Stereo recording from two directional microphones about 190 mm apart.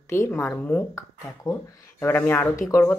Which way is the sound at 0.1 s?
15° left (ahead or behind).